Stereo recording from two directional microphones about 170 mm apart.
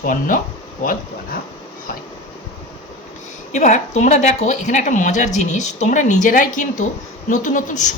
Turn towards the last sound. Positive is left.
turn(degrees=50)  # may be behind; listen again after turning